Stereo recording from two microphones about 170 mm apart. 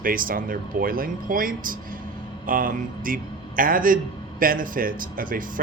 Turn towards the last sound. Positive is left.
turn(degrees=-55)  # may be behind; listen again after turning